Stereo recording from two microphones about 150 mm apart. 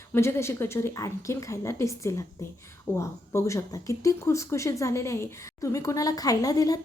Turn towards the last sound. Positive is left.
turn(degrees=25)  # may be behind; listen again after turning